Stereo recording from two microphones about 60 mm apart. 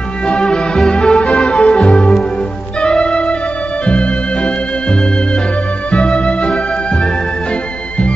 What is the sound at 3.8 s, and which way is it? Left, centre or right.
Organ, centre.